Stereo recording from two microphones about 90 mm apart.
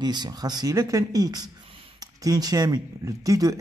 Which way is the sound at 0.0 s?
50° right (ahead or behind).